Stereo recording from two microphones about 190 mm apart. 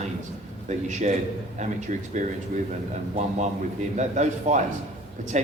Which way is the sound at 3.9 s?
40° right (ahead or behind).